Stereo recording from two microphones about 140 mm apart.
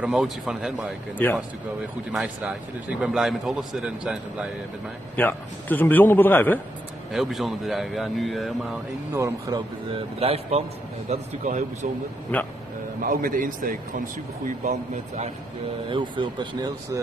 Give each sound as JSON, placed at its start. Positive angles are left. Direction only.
{"t": 0.0, "sound": "speech", "side_deg": -5}
{"t": 1.1, "sound": "a man's voice", "side_deg": 10}
{"t": 2.1, "sound": "speech", "side_deg": -5}
{"t": 5.1, "sound": "a man's voice", "side_deg": 15}
{"t": 7.1, "sound": "speech", "side_deg": 0}
{"t": 9.1, "sound": "speech", "side_deg": -20}
{"t": 9.9, "sound": "speech", "side_deg": -45}
{"t": 11.1, "sound": "a man's voice", "side_deg": -60}
{"t": 12.3, "sound": "a man's voice", "side_deg": 10}
{"t": 13.0, "sound": "speech", "side_deg": -90}
{"t": 14.6, "sound": "a man's voice", "side_deg": -55}
{"t": 15.9, "sound": "speech", "side_deg": -35}